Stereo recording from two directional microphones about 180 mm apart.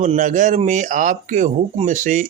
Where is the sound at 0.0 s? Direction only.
45° right (ahead or behind).